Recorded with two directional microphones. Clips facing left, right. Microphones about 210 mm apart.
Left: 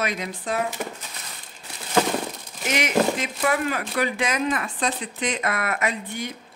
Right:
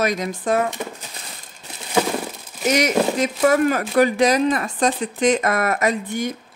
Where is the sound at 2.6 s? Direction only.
40° right (ahead or behind).